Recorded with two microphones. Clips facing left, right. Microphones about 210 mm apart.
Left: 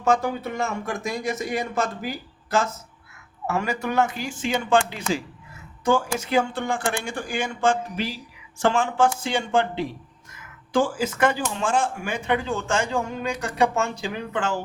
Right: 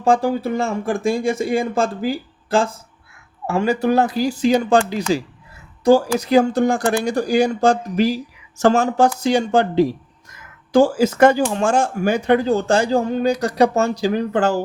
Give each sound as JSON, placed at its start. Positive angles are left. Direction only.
{"t": 0.0, "sound": "speech", "side_deg": -30}